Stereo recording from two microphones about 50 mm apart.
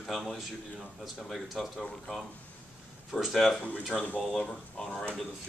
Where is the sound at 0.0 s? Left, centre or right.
Centre.